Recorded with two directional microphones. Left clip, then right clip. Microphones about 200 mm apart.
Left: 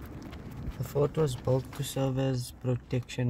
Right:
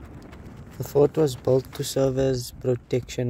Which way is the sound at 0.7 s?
20° right (ahead or behind).